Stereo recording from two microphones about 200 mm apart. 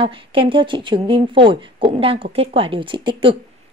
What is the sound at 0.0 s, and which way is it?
A woman's voice, 25° right (ahead or behind).